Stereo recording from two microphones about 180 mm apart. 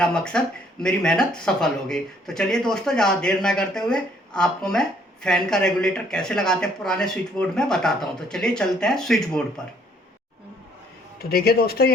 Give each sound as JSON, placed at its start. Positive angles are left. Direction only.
{"t": 0.0, "sound": "speech", "side_deg": 5}
{"t": 11.2, "sound": "speech", "side_deg": 60}